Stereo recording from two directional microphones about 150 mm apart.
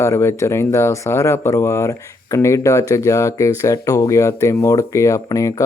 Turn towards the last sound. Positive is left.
turn(degrees=20)  # may be behind; listen again after turning